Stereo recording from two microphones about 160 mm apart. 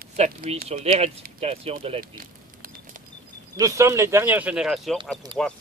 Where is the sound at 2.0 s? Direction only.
65° right (ahead or behind).